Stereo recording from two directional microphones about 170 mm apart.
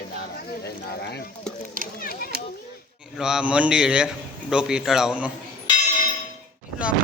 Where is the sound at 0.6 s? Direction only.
70° left (ahead or behind).